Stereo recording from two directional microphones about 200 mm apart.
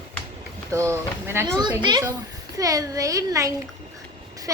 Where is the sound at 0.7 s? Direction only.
15° right (ahead or behind).